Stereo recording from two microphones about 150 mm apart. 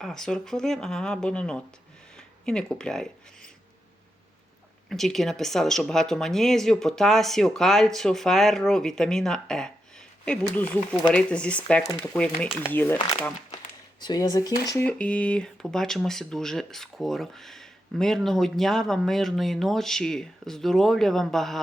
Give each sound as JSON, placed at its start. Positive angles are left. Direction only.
{"t": 0.0, "sound": "speech", "side_deg": 5}
{"t": 4.9, "sound": "speech", "side_deg": 0}
{"t": 14.0, "sound": "speech", "side_deg": 25}
{"t": 14.8, "sound": "speech", "side_deg": 5}